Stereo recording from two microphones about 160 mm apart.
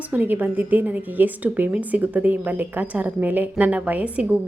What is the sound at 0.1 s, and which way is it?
A woman's voice, 10° right (ahead or behind).